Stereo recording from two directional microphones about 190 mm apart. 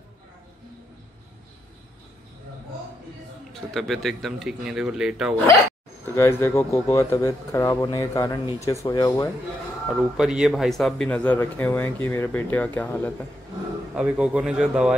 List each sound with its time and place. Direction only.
3.7 s speech: centre (ahead or behind)
6.1 s a man's voice: 15° left (ahead or behind)
9.8 s a man's voice: 5° right (ahead or behind)
13.9 s speech: 5° right (ahead or behind)